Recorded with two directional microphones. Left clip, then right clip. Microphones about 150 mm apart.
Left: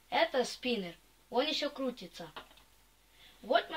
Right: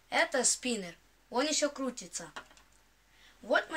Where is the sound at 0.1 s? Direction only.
Centre (ahead or behind).